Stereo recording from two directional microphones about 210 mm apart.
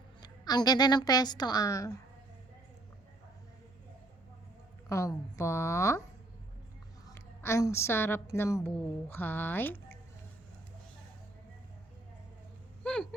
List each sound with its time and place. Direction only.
0.2 s a woman's voice: 20° left (ahead or behind)
4.9 s a woman's voice: 15° left (ahead or behind)
7.1 s a woman's voice: 15° left (ahead or behind)
12.8 s vehicle: 5° left (ahead or behind)